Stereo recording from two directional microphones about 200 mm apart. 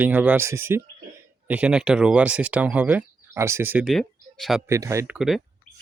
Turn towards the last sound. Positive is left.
turn(degrees=45)  # may be behind; listen again after turning